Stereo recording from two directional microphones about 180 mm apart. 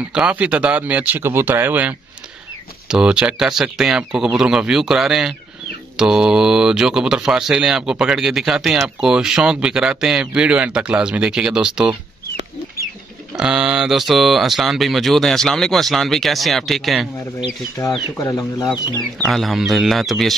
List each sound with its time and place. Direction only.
0.1 s speech: 5° right (ahead or behind)
13.4 s speech: 5° right (ahead or behind)
17.4 s speech: 20° left (ahead or behind)
18.7 s speech: centre (ahead or behind)